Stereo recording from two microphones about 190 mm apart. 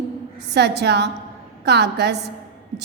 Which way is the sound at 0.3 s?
60° right (ahead or behind).